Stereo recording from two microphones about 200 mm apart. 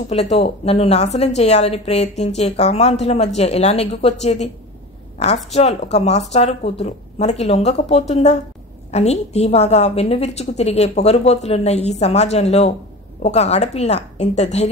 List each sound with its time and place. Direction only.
0.1 s a woman's voice: 35° left (ahead or behind)